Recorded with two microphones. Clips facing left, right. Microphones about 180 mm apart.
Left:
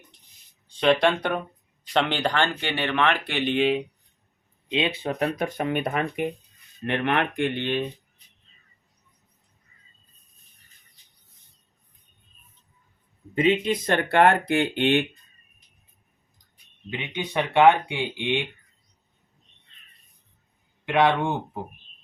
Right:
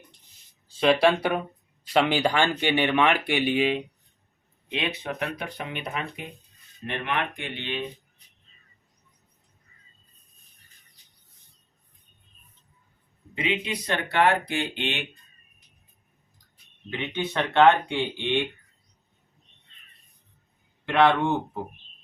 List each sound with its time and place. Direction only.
0.7 s speech: 5° right (ahead or behind)
4.7 s speech: 25° left (ahead or behind); by 7.8 s 50° left (ahead or behind)
13.3 s speech: 45° left (ahead or behind)
16.9 s speech: 15° left (ahead or behind)
20.8 s speech: 15° left (ahead or behind)